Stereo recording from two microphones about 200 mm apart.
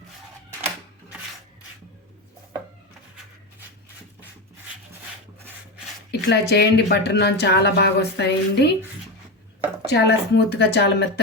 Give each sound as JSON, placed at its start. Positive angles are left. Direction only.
{"t": 6.1, "sound": "speech", "side_deg": 55}
{"t": 9.8, "sound": "speech", "side_deg": 55}